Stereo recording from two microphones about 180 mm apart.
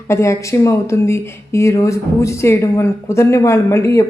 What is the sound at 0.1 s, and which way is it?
A woman's voice, 15° left (ahead or behind).